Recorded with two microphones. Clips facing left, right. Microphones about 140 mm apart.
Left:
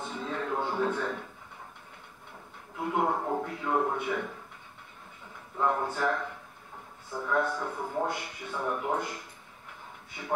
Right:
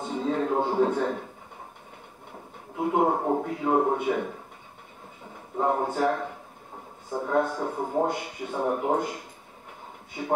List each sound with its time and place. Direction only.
0.0 s a sound: 35° right (ahead or behind)
2.8 s speech: 35° right (ahead or behind)
5.6 s speech: 40° right (ahead or behind)